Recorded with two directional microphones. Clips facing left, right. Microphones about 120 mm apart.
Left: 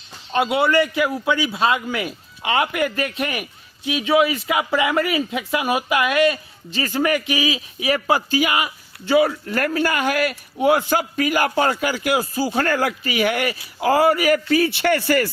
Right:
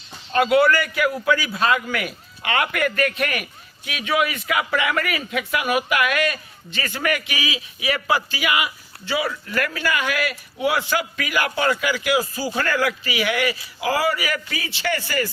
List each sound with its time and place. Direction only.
0.3 s a man's voice: 25° left (ahead or behind); by 15.3 s 60° left (ahead or behind)